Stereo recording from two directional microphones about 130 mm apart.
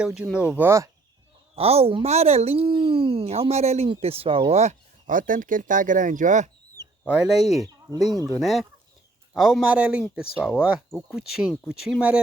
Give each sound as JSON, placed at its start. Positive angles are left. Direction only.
{"t": 0.0, "sound": "speech", "side_deg": -5}
{"t": 1.5, "sound": "speech", "side_deg": -50}
{"t": 7.0, "sound": "speech", "side_deg": 0}